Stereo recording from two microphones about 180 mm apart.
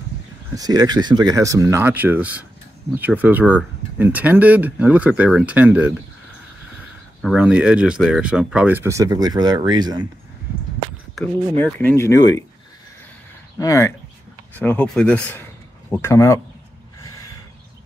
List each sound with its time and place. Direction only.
0.6 s speech: 20° right (ahead or behind)
7.2 s speech: 5° right (ahead or behind); by 10.0 s 25° right (ahead or behind)
11.6 s speech: 10° left (ahead or behind)
13.6 s speech: 15° left (ahead or behind)